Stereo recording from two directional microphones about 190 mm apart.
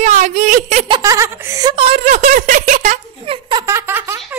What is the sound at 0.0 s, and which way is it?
Speech, 35° right (ahead or behind).